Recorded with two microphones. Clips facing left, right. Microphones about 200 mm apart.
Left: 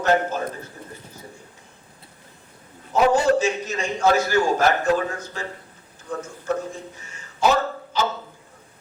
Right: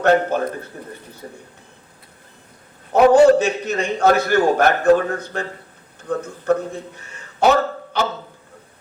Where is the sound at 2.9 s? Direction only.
60° right (ahead or behind).